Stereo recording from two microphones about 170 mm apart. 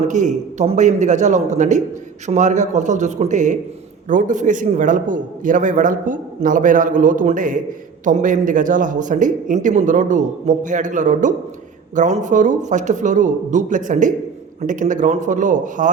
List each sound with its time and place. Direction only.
0.1 s a man's voice: 45° right (ahead or behind)